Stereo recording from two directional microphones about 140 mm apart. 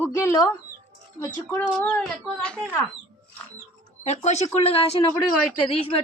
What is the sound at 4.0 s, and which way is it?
Speech, 55° left (ahead or behind).